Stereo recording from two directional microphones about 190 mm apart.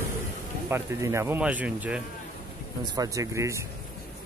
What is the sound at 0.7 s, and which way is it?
Speech, 15° right (ahead or behind).